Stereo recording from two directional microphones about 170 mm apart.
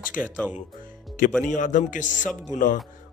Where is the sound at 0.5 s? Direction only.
55° left (ahead or behind).